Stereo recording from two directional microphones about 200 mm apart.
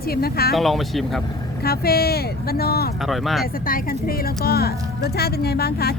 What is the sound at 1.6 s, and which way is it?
A woman's voice, 50° left (ahead or behind).